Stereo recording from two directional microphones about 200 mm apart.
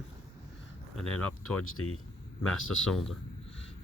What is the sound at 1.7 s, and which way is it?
Speech, 90° left.